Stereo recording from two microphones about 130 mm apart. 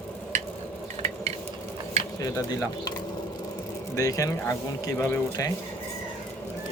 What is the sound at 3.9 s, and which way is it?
Speech, 25° left (ahead or behind).